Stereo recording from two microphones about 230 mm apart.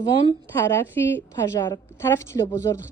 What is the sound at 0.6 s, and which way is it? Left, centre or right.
A woman's voice, centre.